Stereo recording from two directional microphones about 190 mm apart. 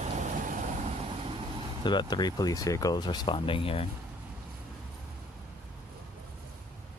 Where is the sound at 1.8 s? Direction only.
25° left (ahead or behind).